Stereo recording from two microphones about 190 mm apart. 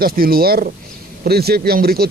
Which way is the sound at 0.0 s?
50° right (ahead or behind).